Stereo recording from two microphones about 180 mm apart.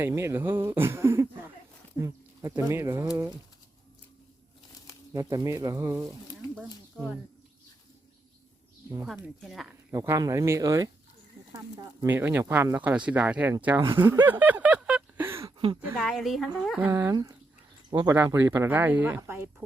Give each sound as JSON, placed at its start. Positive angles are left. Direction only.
{"t": 0.0, "sound": "speech", "side_deg": -15}
{"t": 5.1, "sound": "speech", "side_deg": -20}
{"t": 6.6, "sound": "speech", "side_deg": 0}
{"t": 9.0, "sound": "speech", "side_deg": 0}
{"t": 9.9, "sound": "speech", "side_deg": -15}
{"t": 14.3, "sound": "a sound", "side_deg": -10}
{"t": 15.5, "sound": "a sound", "side_deg": -30}
{"t": 16.0, "sound": "speech", "side_deg": 0}